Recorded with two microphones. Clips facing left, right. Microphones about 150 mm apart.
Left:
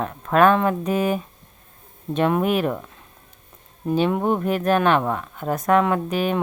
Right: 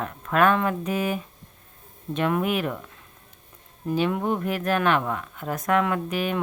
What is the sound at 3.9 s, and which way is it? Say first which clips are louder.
Speech: left 4 dB; 30° left (ahead or behind).